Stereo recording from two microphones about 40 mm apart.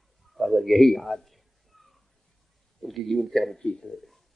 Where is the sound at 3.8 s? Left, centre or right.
Centre.